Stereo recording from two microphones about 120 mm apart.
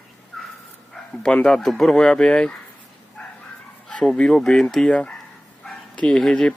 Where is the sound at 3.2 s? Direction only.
10° left (ahead or behind).